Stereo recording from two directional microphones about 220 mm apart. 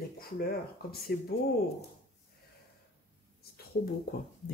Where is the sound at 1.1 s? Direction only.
45° left (ahead or behind).